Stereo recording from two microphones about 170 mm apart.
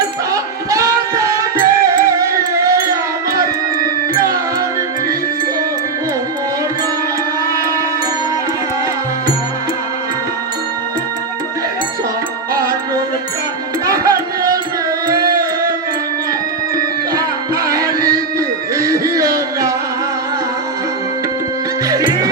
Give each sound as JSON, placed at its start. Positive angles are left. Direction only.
{"t": 0.7, "sound": "music", "side_deg": -20}
{"t": 13.8, "sound": "music", "side_deg": -20}
{"t": 17.2, "sound": "music", "side_deg": -20}
{"t": 21.8, "sound": "music", "side_deg": -20}